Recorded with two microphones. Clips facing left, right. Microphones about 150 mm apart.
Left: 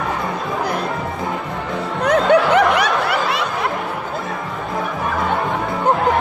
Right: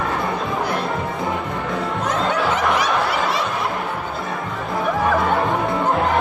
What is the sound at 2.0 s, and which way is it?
Snicker, 65° left (ahead or behind).